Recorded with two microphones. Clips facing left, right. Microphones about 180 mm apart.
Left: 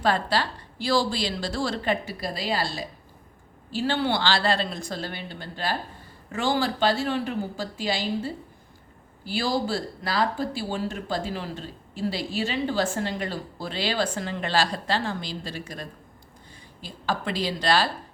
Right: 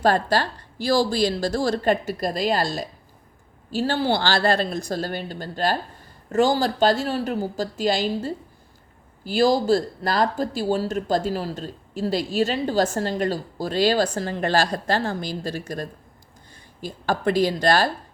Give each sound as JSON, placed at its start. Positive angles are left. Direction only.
{"t": 0.0, "sound": "a woman's voice", "side_deg": -45}